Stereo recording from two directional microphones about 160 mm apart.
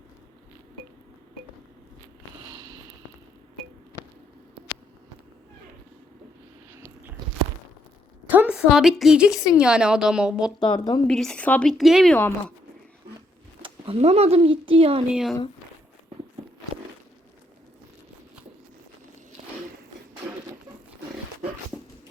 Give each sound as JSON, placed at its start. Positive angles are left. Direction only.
{"t": 6.7, "sound": "biting", "side_deg": -15}
{"t": 8.3, "sound": "a woman's voice", "side_deg": -10}
{"t": 10.6, "sound": "speech", "side_deg": 25}
{"t": 11.0, "sound": "a woman's voice", "side_deg": 5}
{"t": 12.1, "sound": "speech", "side_deg": 10}
{"t": 13.6, "sound": "speech", "side_deg": -35}
{"t": 15.1, "sound": "a woman's voice", "side_deg": 0}